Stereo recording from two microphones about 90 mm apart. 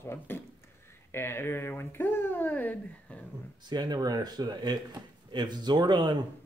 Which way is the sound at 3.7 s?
50° right (ahead or behind).